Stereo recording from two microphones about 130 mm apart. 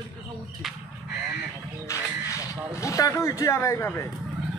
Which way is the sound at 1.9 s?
25° left (ahead or behind).